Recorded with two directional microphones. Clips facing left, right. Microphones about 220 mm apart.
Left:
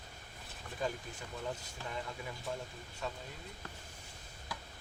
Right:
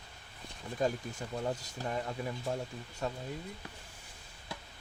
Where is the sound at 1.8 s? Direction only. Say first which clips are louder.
Right 9 dB; 40° right (ahead or behind).